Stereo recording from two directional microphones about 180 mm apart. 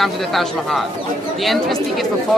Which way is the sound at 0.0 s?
Centre (ahead or behind).